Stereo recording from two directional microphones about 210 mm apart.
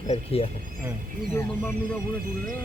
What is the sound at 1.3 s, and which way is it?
Speech, 10° left (ahead or behind).